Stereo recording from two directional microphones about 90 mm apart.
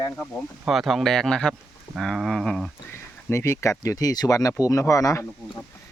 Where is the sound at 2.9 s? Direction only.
30° left (ahead or behind).